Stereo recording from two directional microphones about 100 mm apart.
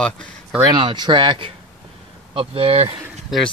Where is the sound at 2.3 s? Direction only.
70° right (ahead or behind).